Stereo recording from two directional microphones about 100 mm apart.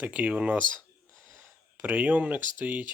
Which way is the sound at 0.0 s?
15° right (ahead or behind).